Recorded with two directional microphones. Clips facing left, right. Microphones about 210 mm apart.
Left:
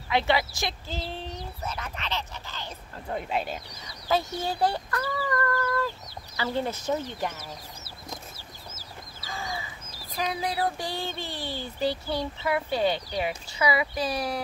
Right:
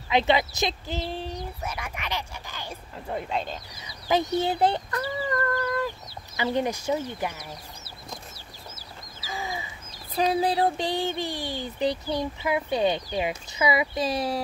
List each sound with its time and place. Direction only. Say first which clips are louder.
0.1 s speech: right 3 dB; 20° right (ahead or behind)
3.1 s speech: even; 5° left (ahead or behind)
4.1 s speech: right 4 dB; 20° right (ahead or behind)
9.3 s crow: right 2 dB; 15° right (ahead or behind)
10.1 s speech: right 6 dB; 30° right (ahead or behind)